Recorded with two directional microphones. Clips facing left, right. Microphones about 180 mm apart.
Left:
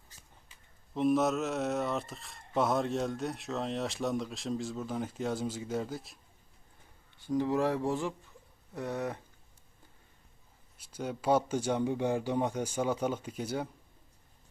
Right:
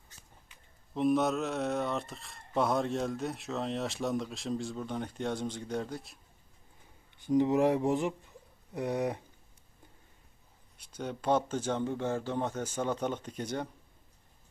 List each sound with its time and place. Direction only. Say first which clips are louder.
0.9 s speech: even; centre (ahead or behind)
7.2 s speech: right 3 dB; 20° right (ahead or behind)
10.8 s speech: left 1 dB; 10° left (ahead or behind)